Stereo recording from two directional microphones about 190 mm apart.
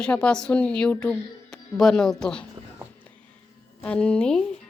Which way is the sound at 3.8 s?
5° left (ahead or behind).